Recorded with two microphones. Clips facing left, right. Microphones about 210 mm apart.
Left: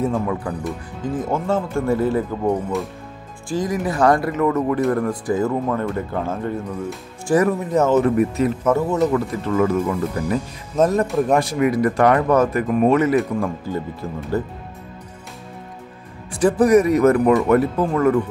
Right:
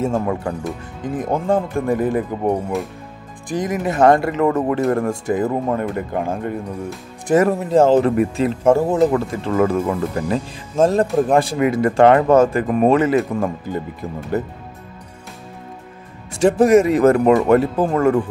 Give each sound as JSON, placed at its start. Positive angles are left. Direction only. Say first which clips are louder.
{"t": 1.0, "sound": "speech", "louder": "right 2 dB", "side_deg": -20}
{"t": 7.2, "sound": "speech", "louder": "right 2 dB", "side_deg": -25}
{"t": 14.0, "sound": "speech", "louder": "right 1 dB", "side_deg": -15}
{"t": 16.3, "sound": "speech", "louder": "right 2 dB", "side_deg": -25}